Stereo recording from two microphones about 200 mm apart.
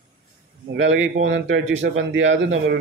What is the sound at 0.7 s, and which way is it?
Speech, 70° right (ahead or behind).